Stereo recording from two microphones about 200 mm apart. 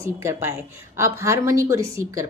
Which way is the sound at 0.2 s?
15° right (ahead or behind).